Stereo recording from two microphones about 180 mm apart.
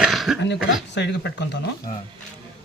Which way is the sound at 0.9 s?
75° left (ahead or behind).